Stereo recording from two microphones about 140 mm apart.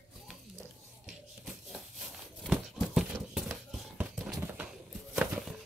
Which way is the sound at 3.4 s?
5° right (ahead or behind).